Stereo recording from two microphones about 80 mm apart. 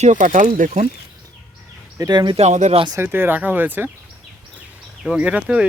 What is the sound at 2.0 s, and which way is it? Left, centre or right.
Speech, right.